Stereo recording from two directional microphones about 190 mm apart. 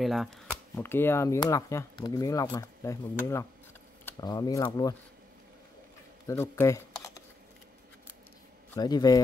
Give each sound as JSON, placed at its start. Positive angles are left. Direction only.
{"t": 0.0, "sound": "speech", "side_deg": 0}
{"t": 0.7, "sound": "speech", "side_deg": 10}
{"t": 6.2, "sound": "camera", "side_deg": 15}
{"t": 8.7, "sound": "speech", "side_deg": 20}